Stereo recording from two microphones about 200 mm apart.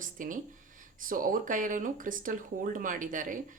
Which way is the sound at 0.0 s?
40° right (ahead or behind).